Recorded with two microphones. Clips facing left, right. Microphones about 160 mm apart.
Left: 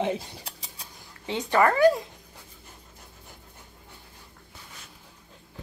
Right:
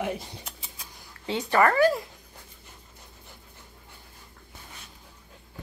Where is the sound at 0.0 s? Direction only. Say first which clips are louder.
Left 3 dB; 30° left (ahead or behind).